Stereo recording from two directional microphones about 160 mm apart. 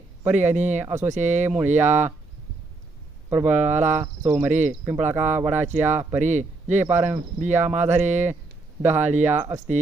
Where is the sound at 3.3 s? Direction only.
10° right (ahead or behind).